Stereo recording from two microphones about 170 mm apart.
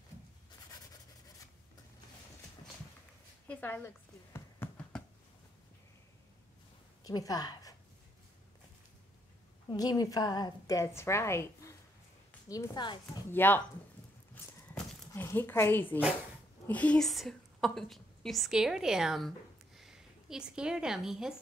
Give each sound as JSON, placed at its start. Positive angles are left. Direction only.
{"t": 3.4, "sound": "a sound", "side_deg": 10}
{"t": 7.0, "sound": "a woman's voice", "side_deg": 20}
{"t": 9.7, "sound": "a woman's voice", "side_deg": 25}
{"t": 13.3, "sound": "speech", "side_deg": 10}
{"t": 14.3, "sound": "horse", "side_deg": 10}
{"t": 15.2, "sound": "a woman's voice", "side_deg": 15}